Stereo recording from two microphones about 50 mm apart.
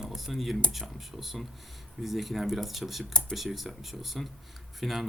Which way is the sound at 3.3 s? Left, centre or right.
Centre.